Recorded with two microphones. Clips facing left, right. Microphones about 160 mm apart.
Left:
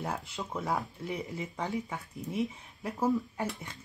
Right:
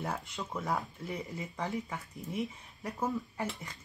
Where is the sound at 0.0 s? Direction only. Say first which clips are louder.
Left 1 dB; 5° left (ahead or behind).